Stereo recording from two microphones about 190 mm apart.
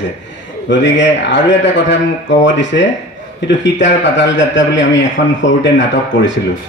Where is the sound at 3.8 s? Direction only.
70° left (ahead or behind).